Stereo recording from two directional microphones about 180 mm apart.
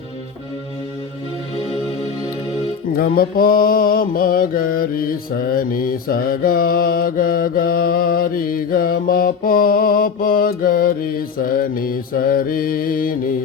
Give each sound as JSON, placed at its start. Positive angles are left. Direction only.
{"t": 2.9, "sound": "mantra", "side_deg": 55}